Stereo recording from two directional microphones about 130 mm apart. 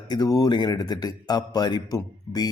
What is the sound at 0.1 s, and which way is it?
A man's voice, 30° left (ahead or behind).